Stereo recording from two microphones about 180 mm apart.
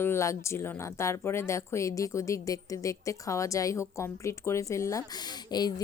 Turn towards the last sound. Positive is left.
turn(degrees=20)  # may be behind; listen again after turning